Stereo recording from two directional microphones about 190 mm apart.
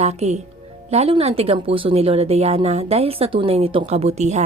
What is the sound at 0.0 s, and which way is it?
A woman's voice, 35° right (ahead or behind).